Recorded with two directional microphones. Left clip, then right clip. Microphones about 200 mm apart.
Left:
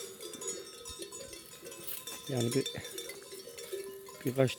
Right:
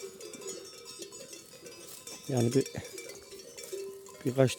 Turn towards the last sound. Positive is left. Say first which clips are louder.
# right 3 dB
turn(degrees=-15)  # may be behind; listen again after turning